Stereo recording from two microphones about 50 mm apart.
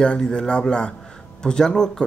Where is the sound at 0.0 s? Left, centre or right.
Centre.